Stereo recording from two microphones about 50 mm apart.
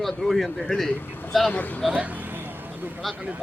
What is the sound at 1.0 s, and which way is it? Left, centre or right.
Speech, left.